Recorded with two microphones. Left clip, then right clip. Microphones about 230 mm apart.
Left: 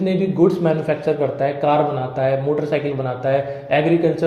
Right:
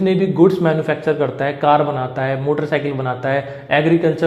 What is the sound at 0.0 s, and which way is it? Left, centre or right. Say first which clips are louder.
A man's voice: right 3 dB; right.